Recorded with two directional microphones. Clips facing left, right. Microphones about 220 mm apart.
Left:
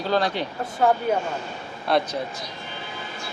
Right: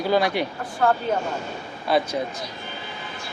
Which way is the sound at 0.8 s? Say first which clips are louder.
Left 1 dB; 15° left (ahead or behind).